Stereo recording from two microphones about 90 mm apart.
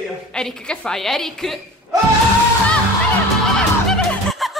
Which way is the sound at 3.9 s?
Centre (ahead or behind).